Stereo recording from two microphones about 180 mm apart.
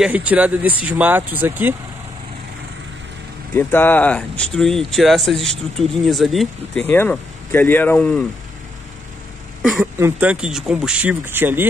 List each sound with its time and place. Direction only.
0.0 s speech: 5° right (ahead or behind)
3.5 s speech: 10° left (ahead or behind)
6.9 s speech: 10° left (ahead or behind)
9.6 s a sound: centre (ahead or behind)
9.9 s speech: 10° right (ahead or behind)